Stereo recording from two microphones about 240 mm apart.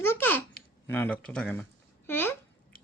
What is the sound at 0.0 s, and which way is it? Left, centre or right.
Babbling, centre.